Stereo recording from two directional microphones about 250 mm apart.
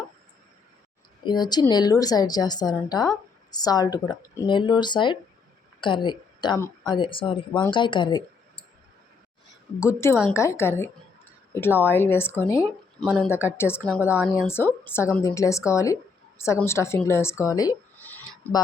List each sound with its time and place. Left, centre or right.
1.2 s speech: centre
9.8 s speech: centre